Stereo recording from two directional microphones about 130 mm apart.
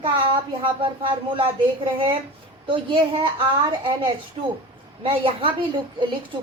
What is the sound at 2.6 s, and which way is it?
A woman's voice, 40° right (ahead or behind).